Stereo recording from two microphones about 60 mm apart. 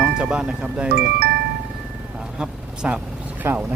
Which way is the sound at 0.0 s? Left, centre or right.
Centre.